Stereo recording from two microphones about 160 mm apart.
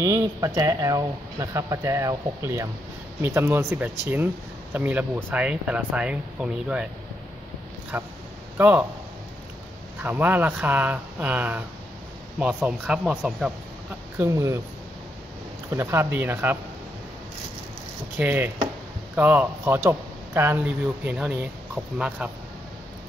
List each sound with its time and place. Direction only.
0.0 s speech: 20° right (ahead or behind)
7.9 s speech: 10° right (ahead or behind)
10.0 s speech: 10° right (ahead or behind)
14.1 s speech: 20° right (ahead or behind)
15.7 s speech: 15° right (ahead or behind)
18.1 s speech: 10° right (ahead or behind)